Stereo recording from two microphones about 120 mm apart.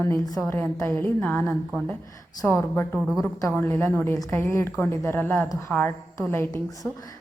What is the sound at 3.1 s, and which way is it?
Speech, centre (ahead or behind).